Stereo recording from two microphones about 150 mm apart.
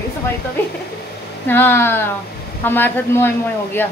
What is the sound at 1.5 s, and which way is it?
Speech, 15° left (ahead or behind).